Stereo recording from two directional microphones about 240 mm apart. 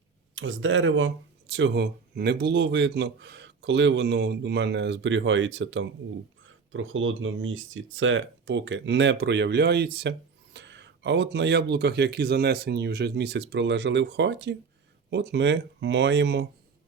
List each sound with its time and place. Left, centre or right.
0.3 s speech: right